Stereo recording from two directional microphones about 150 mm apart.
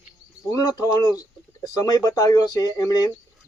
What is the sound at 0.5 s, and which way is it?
Speech, 25° left (ahead or behind).